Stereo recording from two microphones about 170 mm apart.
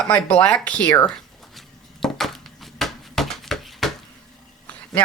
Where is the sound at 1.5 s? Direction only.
Centre (ahead or behind).